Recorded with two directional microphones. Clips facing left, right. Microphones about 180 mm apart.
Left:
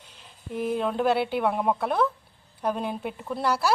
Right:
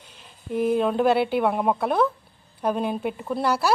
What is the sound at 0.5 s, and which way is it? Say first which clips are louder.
A woman's voice: right 5 dB; 15° right (ahead or behind).